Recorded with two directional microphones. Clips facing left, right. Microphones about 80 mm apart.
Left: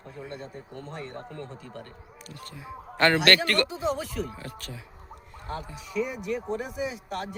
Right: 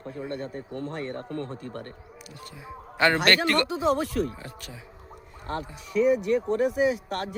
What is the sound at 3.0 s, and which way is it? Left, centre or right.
Speech, centre.